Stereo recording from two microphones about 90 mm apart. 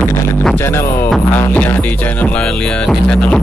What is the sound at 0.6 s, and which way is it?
Music, 25° left (ahead or behind).